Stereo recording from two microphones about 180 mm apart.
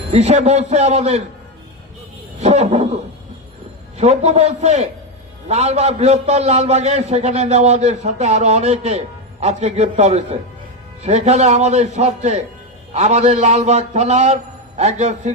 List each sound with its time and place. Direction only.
0.1 s a man's voice: 40° right (ahead or behind)
2.4 s a man's voice: 40° right (ahead or behind)
4.0 s a man's voice: 40° right (ahead or behind)